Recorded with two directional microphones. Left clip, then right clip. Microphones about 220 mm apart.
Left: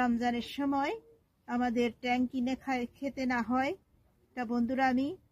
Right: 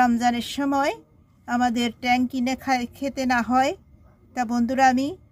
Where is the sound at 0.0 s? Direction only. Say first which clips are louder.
Right 11 dB; 40° right (ahead or behind).